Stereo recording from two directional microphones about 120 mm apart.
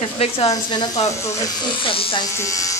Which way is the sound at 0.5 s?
35° left (ahead or behind).